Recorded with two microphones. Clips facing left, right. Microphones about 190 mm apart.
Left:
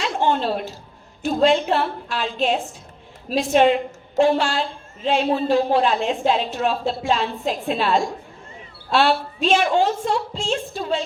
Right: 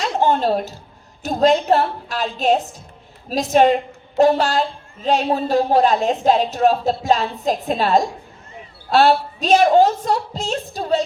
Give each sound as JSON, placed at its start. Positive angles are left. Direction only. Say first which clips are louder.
{"t": 0.0, "sound": "a woman's voice", "louder": "right 3 dB", "side_deg": -40}